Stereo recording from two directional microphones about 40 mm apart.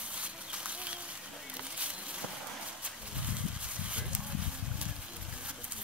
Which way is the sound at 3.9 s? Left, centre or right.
Right.